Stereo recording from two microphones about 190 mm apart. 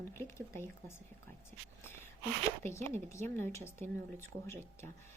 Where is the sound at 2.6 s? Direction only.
15° left (ahead or behind).